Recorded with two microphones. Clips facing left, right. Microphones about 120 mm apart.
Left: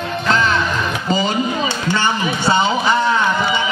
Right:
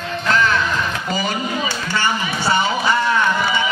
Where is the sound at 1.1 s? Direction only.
20° left (ahead or behind).